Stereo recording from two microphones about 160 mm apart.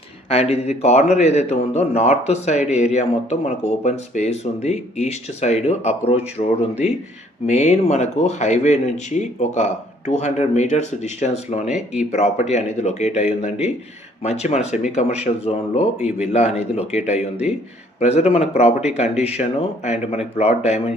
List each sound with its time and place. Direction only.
0.3 s a man's voice: 40° left (ahead or behind)